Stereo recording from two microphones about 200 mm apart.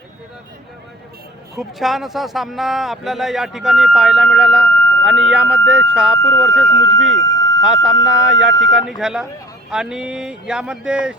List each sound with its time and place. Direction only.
1.5 s speech: centre (ahead or behind)
7.3 s a sound: 15° left (ahead or behind)
7.6 s speech: 5° right (ahead or behind)